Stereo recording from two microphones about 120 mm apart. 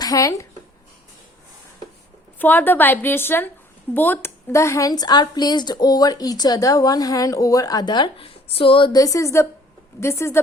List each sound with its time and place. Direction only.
0.0 s speech: 30° left (ahead or behind)
2.4 s a woman's voice: 15° left (ahead or behind); by 8.9 s 50° left (ahead or behind)
8.9 s a woman's voice: 30° left (ahead or behind)